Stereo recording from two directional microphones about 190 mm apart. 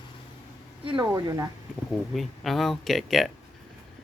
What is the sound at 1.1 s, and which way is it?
Speech, 20° right (ahead or behind).